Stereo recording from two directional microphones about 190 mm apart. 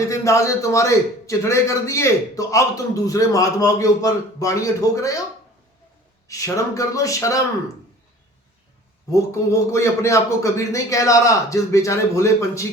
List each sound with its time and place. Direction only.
0.0 s a man's voice: 15° left (ahead or behind)
6.2 s a man's voice: 15° left (ahead or behind)
9.0 s a man's voice: 15° left (ahead or behind)